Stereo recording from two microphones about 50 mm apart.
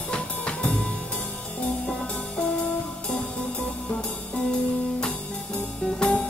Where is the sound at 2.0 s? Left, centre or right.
Centre.